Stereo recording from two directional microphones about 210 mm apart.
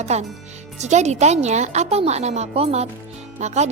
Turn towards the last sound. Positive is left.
turn(degrees=-35)  # may be behind; listen again after turning